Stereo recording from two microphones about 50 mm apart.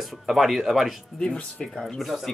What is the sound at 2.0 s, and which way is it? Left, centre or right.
Speech, centre.